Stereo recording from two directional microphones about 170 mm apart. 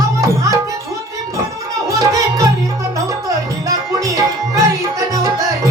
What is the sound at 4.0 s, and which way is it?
Music, 20° right (ahead or behind).